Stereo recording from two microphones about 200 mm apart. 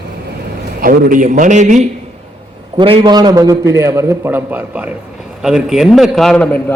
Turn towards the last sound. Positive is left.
turn(degrees=5)  # may be behind; listen again after turning